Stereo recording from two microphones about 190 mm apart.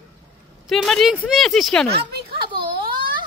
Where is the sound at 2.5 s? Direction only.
25° right (ahead or behind).